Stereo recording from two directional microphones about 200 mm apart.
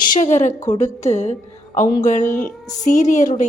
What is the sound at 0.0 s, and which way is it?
A woman's voice, 40° left (ahead or behind).